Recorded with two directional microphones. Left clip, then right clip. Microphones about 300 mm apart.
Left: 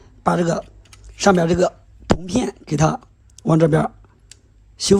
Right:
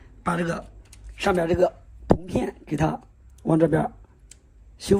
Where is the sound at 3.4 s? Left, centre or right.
Left.